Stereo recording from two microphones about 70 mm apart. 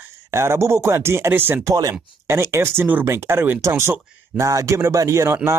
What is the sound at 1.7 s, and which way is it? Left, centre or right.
Speech, right.